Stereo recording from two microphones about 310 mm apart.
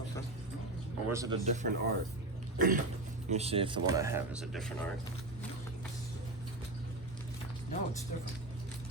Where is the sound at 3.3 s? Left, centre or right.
Centre.